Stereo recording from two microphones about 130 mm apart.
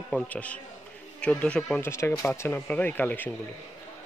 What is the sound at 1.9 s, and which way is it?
A man's voice, 20° left (ahead or behind).